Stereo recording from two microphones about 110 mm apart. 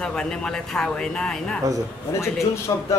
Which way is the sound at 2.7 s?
35° left (ahead or behind).